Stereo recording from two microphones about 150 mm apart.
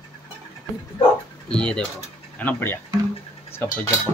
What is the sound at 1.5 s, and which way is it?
Speech, 5° left (ahead or behind).